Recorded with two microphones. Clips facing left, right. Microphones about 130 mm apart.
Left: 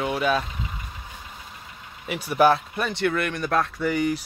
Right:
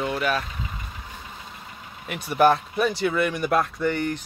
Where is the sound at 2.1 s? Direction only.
Centre (ahead or behind).